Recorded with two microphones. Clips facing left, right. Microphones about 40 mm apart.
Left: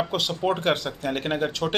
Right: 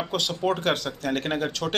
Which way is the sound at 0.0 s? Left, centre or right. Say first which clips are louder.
Left 1 dB; centre.